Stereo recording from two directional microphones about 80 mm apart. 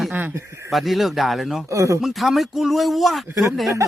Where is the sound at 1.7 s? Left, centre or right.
Right.